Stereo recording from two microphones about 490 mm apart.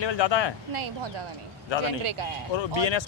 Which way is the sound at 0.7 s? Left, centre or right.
Right.